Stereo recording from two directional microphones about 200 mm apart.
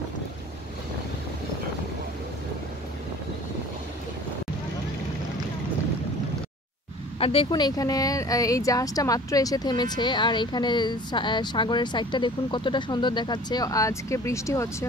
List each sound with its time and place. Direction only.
7.2 s speech: 25° left (ahead or behind)